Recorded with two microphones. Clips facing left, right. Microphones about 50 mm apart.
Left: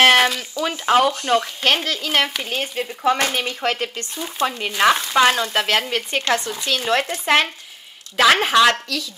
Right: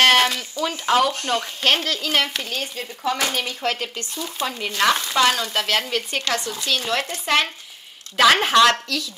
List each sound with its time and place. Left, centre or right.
0.0 s a sound: centre
0.6 s speech: left
1.2 s frying: left
1.6 s speech: centre
2.5 s speech: left
3.3 s frying: centre
8.2 s speech: centre